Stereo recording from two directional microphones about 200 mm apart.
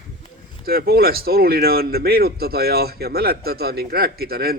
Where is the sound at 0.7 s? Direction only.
50° right (ahead or behind).